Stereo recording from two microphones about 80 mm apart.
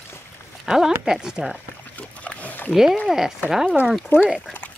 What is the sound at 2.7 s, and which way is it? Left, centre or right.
Speech, centre.